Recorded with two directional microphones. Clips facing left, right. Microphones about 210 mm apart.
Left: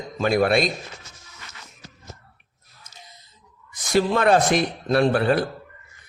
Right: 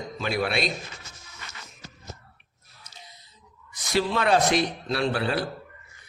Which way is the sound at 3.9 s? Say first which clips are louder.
Left 4 dB; 50° left (ahead or behind).